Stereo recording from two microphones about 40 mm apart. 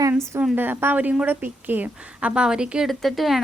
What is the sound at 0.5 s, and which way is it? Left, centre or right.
A woman's voice, right.